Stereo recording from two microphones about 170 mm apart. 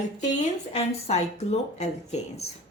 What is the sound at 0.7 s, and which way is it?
Speech, 40° left (ahead or behind).